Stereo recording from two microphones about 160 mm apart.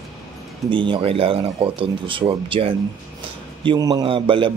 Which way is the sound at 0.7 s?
30° right (ahead or behind).